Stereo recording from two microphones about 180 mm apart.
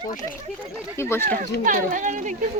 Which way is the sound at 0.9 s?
15° left (ahead or behind).